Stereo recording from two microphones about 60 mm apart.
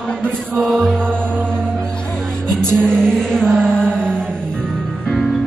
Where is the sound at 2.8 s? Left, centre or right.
Centre.